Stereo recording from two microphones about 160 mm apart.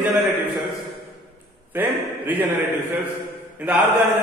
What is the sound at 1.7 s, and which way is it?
Speech, 10° right (ahead or behind).